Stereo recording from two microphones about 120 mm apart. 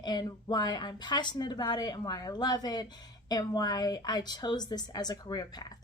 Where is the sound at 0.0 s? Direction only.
35° left (ahead or behind).